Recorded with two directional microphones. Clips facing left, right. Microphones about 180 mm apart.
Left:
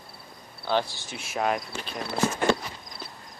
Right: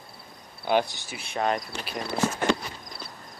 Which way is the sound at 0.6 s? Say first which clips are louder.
Right 2 dB; 15° right (ahead or behind).